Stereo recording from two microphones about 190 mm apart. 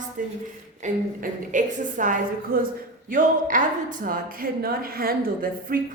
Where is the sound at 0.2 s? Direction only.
45° right (ahead or behind).